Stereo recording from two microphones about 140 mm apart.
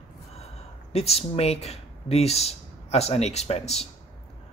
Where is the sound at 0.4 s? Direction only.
45° left (ahead or behind).